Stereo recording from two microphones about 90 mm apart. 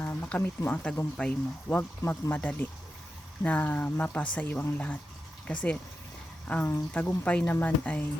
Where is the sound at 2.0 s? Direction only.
25° left (ahead or behind).